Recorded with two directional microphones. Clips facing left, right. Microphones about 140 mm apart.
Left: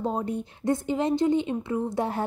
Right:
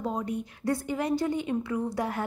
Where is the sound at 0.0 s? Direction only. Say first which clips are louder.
Left 3 dB; 30° left (ahead or behind).